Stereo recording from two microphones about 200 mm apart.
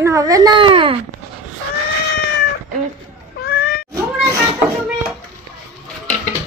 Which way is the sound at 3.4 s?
55° left (ahead or behind).